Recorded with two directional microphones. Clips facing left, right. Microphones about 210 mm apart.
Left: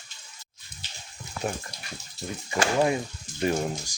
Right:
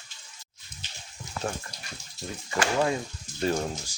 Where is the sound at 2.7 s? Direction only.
15° left (ahead or behind).